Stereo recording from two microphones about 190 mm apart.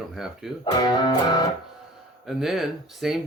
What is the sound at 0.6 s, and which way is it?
Speech, 20° left (ahead or behind).